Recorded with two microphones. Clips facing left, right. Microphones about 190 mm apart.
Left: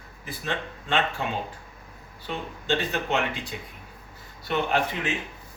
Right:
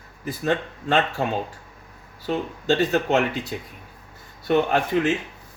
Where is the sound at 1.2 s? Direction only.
40° right (ahead or behind).